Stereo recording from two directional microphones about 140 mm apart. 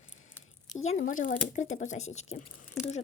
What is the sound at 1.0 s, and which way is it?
Speech, 75° left (ahead or behind).